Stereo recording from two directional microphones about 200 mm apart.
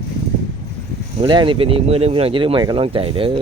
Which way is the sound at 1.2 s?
25° right (ahead or behind).